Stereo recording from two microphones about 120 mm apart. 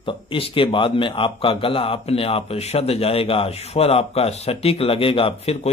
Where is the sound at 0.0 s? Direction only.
45° left (ahead or behind).